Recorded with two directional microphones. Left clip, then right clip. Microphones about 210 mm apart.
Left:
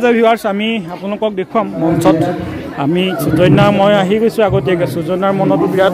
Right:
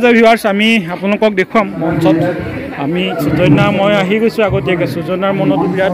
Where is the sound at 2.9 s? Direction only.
30° left (ahead or behind).